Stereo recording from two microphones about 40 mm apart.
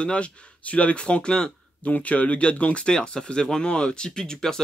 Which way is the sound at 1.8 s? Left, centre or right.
Left.